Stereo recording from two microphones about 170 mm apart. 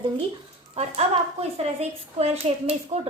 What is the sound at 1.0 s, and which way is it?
A woman's voice, 40° right (ahead or behind).